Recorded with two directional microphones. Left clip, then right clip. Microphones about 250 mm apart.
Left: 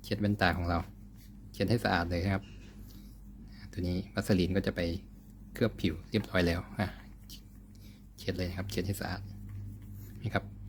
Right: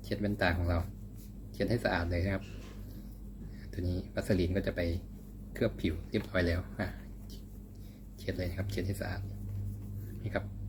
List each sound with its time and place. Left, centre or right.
0.0 s speech: left
3.8 s speech: left
8.2 s speech: left